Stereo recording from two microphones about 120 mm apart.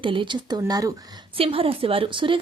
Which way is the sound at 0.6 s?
30° right (ahead or behind).